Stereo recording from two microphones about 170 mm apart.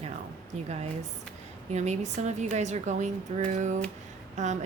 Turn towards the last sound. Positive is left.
turn(degrees=-45)  # may be behind; listen again after turning